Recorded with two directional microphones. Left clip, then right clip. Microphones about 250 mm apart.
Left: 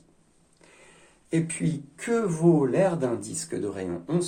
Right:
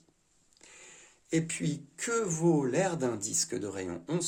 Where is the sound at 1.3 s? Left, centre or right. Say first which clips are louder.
Left 3 dB; right.